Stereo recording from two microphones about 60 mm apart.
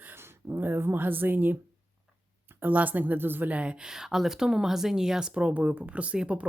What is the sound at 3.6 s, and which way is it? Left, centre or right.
Speech, centre.